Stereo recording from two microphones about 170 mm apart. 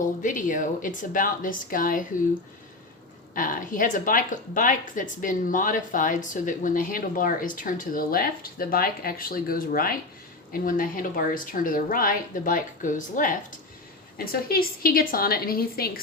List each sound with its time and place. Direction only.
0.0 s speech: 50° left (ahead or behind)
3.3 s a woman's voice: 50° left (ahead or behind)
14.4 s a woman's voice: 60° left (ahead or behind)